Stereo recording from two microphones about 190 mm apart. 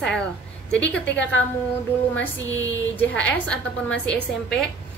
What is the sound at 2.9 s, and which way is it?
A woman's voice, 10° left (ahead or behind).